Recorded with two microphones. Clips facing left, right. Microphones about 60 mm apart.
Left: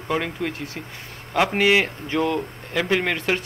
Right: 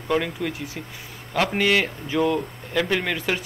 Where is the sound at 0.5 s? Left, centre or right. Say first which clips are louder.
Left 1 dB; left.